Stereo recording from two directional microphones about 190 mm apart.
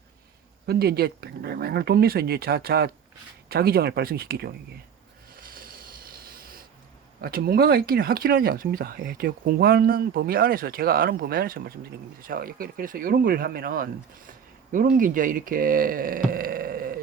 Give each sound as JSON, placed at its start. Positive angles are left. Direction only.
{"t": 0.7, "sound": "speech", "side_deg": -55}
{"t": 5.4, "sound": "a sound", "side_deg": -50}
{"t": 7.2, "sound": "speech", "side_deg": -50}